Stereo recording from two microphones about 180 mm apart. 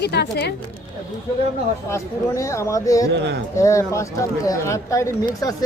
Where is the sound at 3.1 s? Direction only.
75° right (ahead or behind).